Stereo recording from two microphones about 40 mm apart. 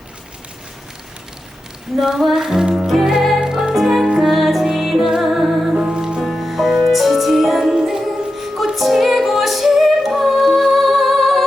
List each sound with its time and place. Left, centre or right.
2.0 s female singing: centre
3.2 s music: centre
3.4 s music: centre
5.7 s music: centre
6.3 s music: centre